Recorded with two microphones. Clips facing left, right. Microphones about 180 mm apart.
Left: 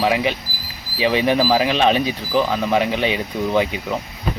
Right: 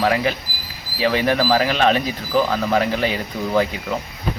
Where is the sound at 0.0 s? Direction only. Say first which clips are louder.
Even; 5° left (ahead or behind).